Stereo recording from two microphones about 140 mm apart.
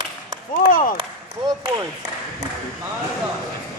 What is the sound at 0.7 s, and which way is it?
Speech, 80° left.